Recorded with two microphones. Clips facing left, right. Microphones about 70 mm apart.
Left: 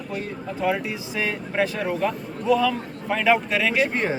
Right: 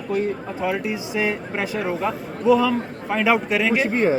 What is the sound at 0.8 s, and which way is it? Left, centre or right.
Speech, centre.